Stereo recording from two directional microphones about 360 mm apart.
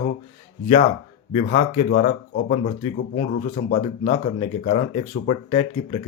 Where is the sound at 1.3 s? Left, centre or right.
Centre.